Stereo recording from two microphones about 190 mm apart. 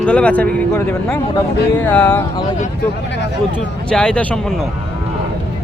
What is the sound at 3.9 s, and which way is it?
Speech, 5° left (ahead or behind).